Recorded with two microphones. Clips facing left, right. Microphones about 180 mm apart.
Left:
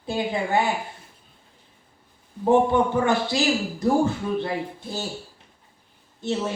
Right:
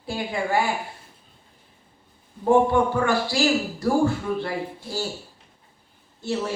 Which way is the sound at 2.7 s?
20° left (ahead or behind).